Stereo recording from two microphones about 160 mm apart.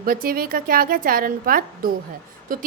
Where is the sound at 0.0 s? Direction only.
65° right (ahead or behind).